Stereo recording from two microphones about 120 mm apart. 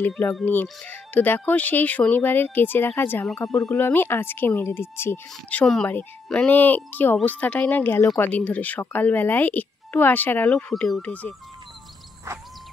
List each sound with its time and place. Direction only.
0.5 s speech: 15° left (ahead or behind)
10.5 s speech: 5° left (ahead or behind)
12.3 s a sound: 25° right (ahead or behind)